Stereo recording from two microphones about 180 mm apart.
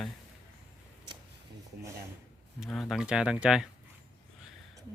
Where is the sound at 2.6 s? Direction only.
Centre (ahead or behind).